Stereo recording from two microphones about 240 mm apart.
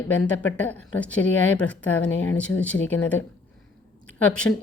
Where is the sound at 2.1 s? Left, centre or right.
Left.